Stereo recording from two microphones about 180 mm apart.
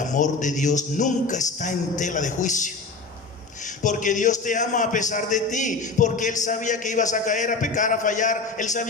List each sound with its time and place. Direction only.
0.0 s a man's voice: 45° left (ahead or behind)
3.8 s a man's voice: 45° left (ahead or behind)